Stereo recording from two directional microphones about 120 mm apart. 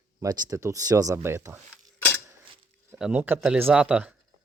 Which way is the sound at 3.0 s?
5° right (ahead or behind).